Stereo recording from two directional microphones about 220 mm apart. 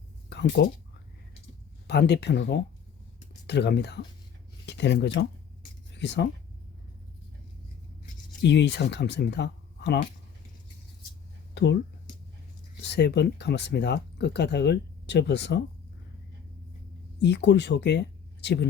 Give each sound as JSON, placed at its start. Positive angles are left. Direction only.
{"t": 0.3, "sound": "speech", "side_deg": 50}
{"t": 1.9, "sound": "speech", "side_deg": 50}
{"t": 8.4, "sound": "speech", "side_deg": 55}
{"t": 11.5, "sound": "speech", "side_deg": 50}
{"t": 12.8, "sound": "speech", "side_deg": 50}
{"t": 17.2, "sound": "speech", "side_deg": 50}